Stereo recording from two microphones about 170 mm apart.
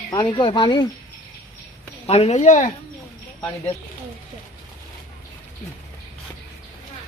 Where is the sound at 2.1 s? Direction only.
40° left (ahead or behind).